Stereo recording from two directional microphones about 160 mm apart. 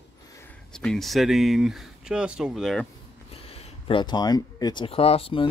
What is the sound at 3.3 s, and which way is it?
Speech, 40° left (ahead or behind).